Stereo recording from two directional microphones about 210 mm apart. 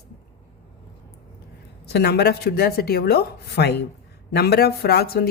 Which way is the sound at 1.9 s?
50° left (ahead or behind).